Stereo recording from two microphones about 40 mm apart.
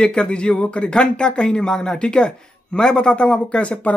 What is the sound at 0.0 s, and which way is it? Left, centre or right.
Speech, left.